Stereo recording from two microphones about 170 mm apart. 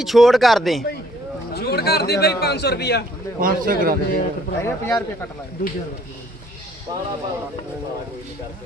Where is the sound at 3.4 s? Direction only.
55° right (ahead or behind).